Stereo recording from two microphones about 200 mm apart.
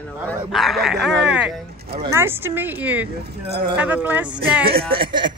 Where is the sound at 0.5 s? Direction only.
Centre (ahead or behind).